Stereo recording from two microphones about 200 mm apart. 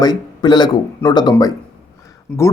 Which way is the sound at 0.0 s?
20° left (ahead or behind).